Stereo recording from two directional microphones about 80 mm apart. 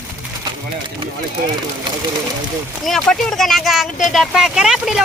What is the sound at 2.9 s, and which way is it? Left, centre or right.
Speech, centre.